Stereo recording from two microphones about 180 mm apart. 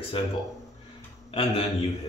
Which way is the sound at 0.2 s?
30° left (ahead or behind).